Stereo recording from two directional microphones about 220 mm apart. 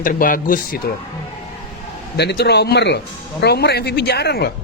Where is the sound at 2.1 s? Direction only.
50° left (ahead or behind).